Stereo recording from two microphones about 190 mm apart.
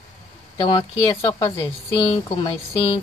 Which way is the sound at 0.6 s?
20° left (ahead or behind).